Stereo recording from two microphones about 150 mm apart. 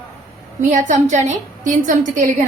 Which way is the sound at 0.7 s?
55° right (ahead or behind).